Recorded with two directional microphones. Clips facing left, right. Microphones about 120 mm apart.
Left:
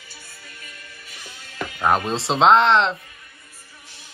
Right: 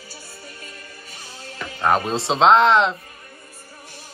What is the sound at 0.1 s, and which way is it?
Music, 30° right (ahead or behind).